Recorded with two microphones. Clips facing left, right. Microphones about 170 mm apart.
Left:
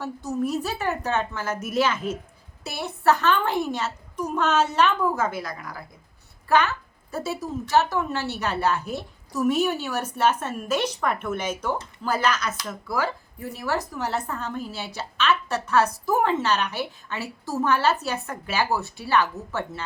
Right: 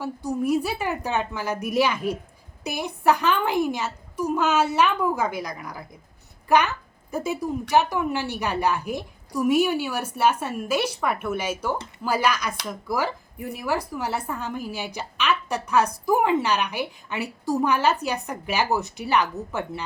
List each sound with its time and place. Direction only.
0.0 s speech: 10° right (ahead or behind)